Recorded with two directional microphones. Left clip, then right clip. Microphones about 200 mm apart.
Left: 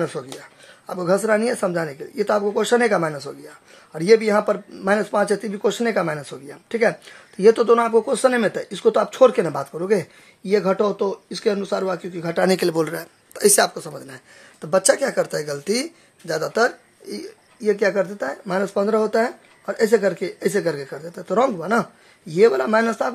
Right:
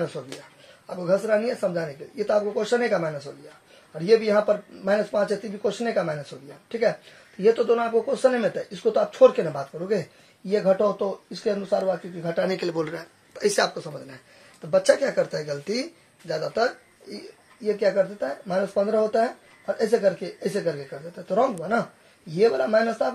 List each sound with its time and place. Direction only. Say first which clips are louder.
0.2 s speech: left 4 dB; 45° left (ahead or behind)
7.4 s speech: left 6 dB; 55° left (ahead or behind)